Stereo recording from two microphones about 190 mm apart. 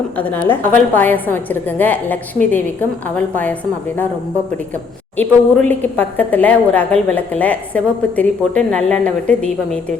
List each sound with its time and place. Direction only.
0.2 s a woman's voice: 10° left (ahead or behind)
5.1 s a woman's voice: 10° left (ahead or behind)